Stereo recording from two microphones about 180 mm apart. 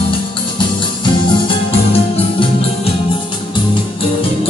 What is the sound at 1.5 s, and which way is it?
Music, 30° left (ahead or behind).